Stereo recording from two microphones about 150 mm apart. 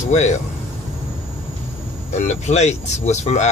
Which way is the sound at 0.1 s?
50° left (ahead or behind).